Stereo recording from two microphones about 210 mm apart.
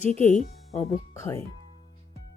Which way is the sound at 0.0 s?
35° left (ahead or behind).